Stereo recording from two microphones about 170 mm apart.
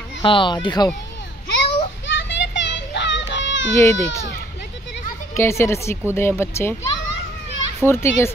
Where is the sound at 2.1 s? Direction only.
90° left.